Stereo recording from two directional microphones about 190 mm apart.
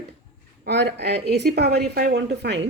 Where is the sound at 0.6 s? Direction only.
60° right (ahead or behind).